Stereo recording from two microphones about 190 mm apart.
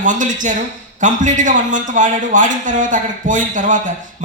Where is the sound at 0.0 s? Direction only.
40° right (ahead or behind).